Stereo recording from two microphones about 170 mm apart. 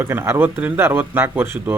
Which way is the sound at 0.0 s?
15° right (ahead or behind).